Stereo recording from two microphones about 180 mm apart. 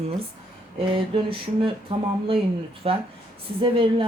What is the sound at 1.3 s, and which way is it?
A woman's voice, 30° right (ahead or behind).